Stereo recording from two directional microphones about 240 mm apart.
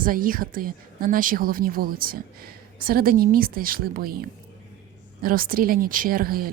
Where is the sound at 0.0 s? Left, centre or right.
Right.